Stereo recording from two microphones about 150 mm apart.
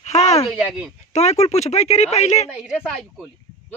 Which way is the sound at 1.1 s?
45° left (ahead or behind).